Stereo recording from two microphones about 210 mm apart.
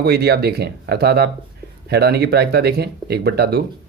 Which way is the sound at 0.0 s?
50° right (ahead or behind).